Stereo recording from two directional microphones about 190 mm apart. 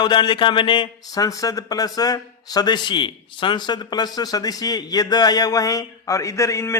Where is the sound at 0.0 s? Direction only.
25° left (ahead or behind).